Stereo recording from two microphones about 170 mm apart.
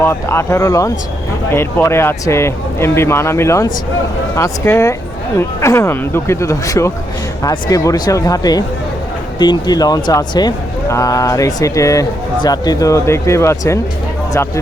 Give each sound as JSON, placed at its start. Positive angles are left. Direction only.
{"t": 0.0, "sound": "a man's voice", "side_deg": 15}